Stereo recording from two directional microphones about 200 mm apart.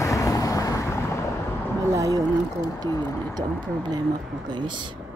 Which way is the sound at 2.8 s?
15° left (ahead or behind).